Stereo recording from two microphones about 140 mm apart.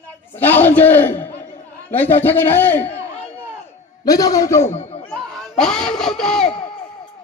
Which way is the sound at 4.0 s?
25° left (ahead or behind).